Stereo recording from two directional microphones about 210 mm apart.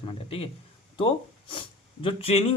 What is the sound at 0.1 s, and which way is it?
A man's voice, 30° left (ahead or behind).